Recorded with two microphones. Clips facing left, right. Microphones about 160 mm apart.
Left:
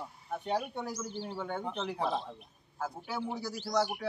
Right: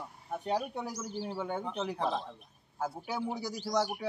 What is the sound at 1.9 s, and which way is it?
Speech, 10° left (ahead or behind).